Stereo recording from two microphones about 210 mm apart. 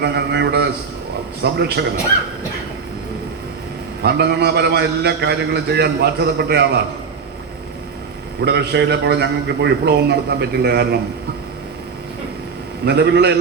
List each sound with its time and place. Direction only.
0.0 s a man's voice: 55° right (ahead or behind)
4.0 s a man's voice: 50° right (ahead or behind)
8.4 s a man's voice: 55° right (ahead or behind)
12.8 s a man's voice: 55° right (ahead or behind)